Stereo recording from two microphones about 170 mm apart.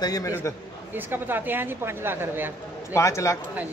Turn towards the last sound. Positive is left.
turn(degrees=15)  # may be behind; listen again after turning